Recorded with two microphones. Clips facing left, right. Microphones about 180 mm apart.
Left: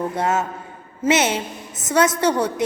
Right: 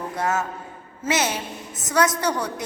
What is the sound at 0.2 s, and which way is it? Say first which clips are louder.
A woman's voice: even; 20° left (ahead or behind).